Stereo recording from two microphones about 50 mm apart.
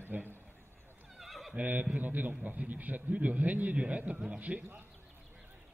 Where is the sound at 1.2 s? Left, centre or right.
Centre.